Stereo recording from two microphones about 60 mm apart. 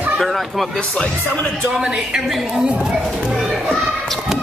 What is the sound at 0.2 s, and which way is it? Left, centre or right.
Speech, centre.